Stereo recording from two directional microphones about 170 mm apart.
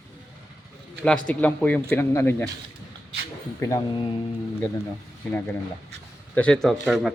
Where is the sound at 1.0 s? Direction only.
5° left (ahead or behind).